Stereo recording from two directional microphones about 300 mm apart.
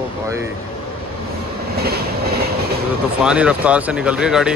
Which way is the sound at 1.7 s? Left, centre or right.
Right.